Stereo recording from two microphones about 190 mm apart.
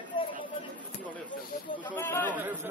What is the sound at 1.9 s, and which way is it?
Speech, 10° left (ahead or behind).